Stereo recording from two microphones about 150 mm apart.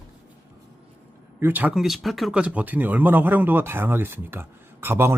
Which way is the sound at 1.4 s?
10° right (ahead or behind).